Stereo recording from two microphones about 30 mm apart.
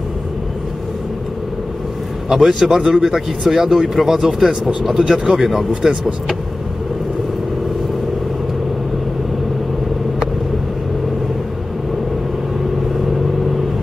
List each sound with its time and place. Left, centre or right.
2.2 s speech: centre
4.3 s speech: right
5.3 s speech: centre